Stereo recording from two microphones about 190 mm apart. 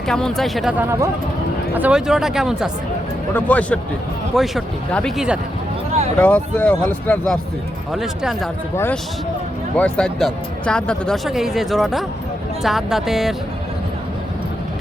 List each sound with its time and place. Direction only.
0.1 s speech: centre (ahead or behind)
3.3 s speech: 10° left (ahead or behind)
6.1 s speech: 10° left (ahead or behind)
8.7 s speech: 10° left (ahead or behind)